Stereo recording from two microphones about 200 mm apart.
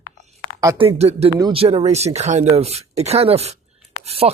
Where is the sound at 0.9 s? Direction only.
30° right (ahead or behind).